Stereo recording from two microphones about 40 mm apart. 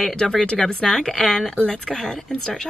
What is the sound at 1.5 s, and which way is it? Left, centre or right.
Speech, left.